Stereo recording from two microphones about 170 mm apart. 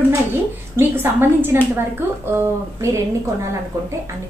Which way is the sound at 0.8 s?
15° right (ahead or behind).